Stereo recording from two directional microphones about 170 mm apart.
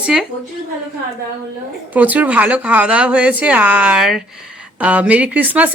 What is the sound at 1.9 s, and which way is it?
Speech, 10° right (ahead or behind).